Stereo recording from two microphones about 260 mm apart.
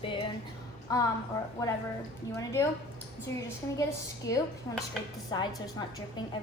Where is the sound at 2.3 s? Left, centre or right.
Centre.